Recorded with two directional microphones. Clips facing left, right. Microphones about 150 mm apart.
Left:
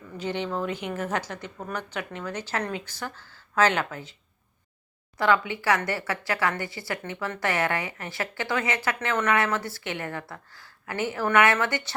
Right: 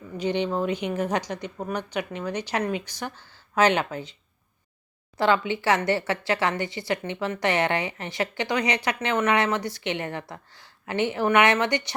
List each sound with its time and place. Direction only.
0.2 s a woman's voice: 20° right (ahead or behind)
5.1 s a woman's voice: 25° right (ahead or behind)